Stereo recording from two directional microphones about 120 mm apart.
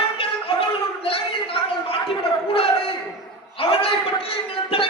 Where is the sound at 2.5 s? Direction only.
50° left (ahead or behind).